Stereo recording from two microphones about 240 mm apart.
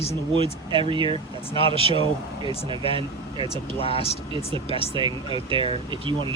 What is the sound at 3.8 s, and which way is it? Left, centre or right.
Speech, left.